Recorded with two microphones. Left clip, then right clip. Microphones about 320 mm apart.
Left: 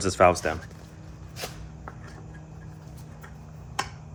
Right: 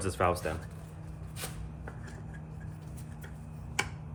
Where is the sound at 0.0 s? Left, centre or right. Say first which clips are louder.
Left 10 dB; centre.